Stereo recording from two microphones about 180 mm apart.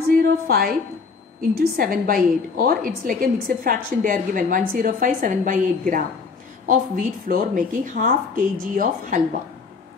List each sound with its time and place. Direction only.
0.5 s a woman's voice: 55° right (ahead or behind)